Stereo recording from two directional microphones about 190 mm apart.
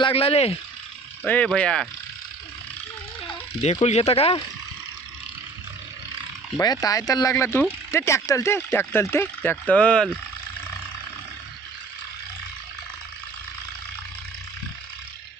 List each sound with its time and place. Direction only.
0.0 s speech: 30° left (ahead or behind)
1.2 s speech: 5° left (ahead or behind)
3.6 s speech: 35° left (ahead or behind)
6.8 s speech: 20° left (ahead or behind)